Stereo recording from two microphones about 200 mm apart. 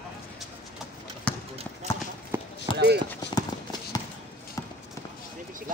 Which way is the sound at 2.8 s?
55° right (ahead or behind).